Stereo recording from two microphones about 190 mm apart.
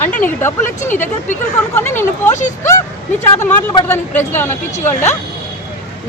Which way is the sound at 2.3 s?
40° left (ahead or behind).